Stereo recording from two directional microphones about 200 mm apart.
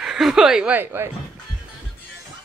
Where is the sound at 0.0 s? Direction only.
Centre (ahead or behind).